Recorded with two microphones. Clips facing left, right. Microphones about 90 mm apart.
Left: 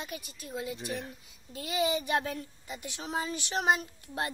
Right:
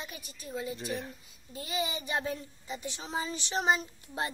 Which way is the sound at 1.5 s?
70° left (ahead or behind).